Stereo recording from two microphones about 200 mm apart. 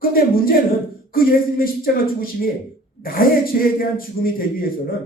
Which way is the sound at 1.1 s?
45° left (ahead or behind).